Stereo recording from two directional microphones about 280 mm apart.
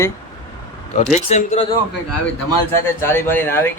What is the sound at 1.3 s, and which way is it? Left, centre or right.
Speech, left.